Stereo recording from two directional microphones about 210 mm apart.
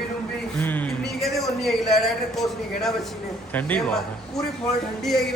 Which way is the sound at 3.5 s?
5° left (ahead or behind).